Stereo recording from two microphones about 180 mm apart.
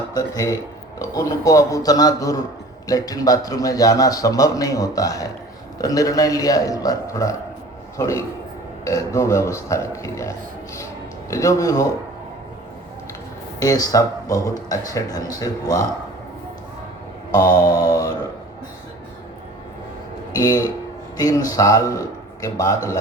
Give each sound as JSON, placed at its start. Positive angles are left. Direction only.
{"t": 0.1, "sound": "a man's voice", "side_deg": 20}
{"t": 13.6, "sound": "a man's voice", "side_deg": 20}
{"t": 17.3, "sound": "a man's voice", "side_deg": 20}
{"t": 20.3, "sound": "a man's voice", "side_deg": 20}